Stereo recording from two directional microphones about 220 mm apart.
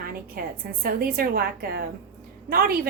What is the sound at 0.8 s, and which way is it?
A woman's voice, 45° right (ahead or behind).